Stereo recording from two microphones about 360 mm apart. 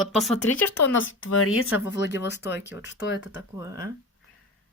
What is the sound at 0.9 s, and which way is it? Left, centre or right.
Speech, left.